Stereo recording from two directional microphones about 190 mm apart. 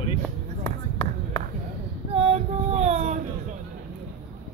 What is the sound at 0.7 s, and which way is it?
Basketball bounce, 25° left (ahead or behind).